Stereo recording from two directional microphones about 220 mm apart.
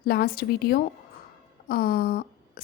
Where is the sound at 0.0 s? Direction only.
45° left (ahead or behind).